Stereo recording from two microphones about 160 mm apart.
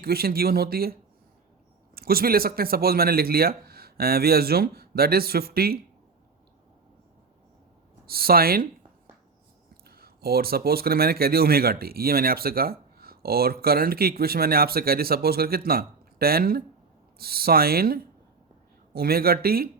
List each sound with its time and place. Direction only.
0.0 s speech: 70° right (ahead or behind)
2.0 s speech: 70° right (ahead or behind)
8.0 s speech: 70° right (ahead or behind)
9.8 s speech: 75° right (ahead or behind)